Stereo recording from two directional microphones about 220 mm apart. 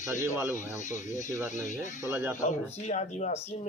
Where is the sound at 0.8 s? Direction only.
35° left (ahead or behind).